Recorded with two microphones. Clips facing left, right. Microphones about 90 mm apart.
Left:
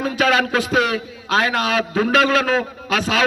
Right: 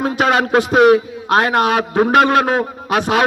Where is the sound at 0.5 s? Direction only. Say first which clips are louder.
Right 8 dB; 20° right (ahead or behind).